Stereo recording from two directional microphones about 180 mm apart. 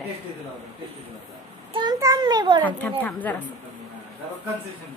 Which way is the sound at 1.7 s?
25° right (ahead or behind).